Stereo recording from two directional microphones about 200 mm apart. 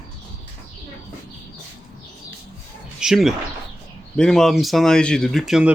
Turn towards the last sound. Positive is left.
turn(degrees=0)  # may be behind; listen again after turning